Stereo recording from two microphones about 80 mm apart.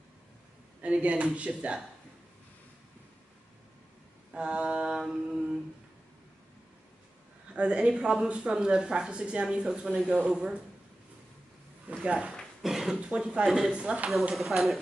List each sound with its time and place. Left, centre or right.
0.8 s speech: centre
4.3 s speech: centre
7.5 s speech: centre
11.9 s speech: centre
14.3 s speech: centre